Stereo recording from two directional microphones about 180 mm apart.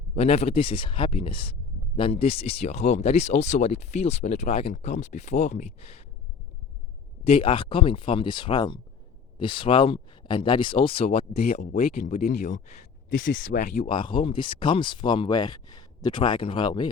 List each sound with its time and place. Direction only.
0.1 s speech: 35° left (ahead or behind)
7.3 s speech: 30° left (ahead or behind)
11.7 s speech: 55° left (ahead or behind)
13.1 s speech: 90° left; by 13.7 s 70° left (ahead or behind)
13.7 s speech: 30° left (ahead or behind)